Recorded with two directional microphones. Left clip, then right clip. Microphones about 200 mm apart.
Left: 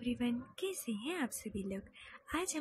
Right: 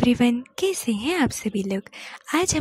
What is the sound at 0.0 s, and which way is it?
Speech, 50° right (ahead or behind).